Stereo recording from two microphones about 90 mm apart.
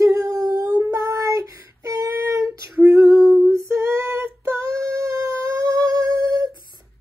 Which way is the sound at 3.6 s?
30° right (ahead or behind).